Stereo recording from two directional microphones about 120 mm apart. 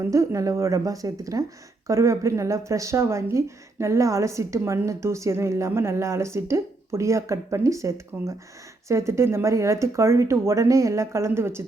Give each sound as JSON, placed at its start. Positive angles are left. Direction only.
{"t": 0.0, "sound": "speech", "side_deg": -25}